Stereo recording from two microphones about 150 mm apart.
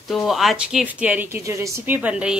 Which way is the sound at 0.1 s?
Centre (ahead or behind).